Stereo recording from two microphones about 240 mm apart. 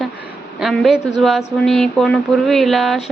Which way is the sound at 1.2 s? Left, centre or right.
Centre.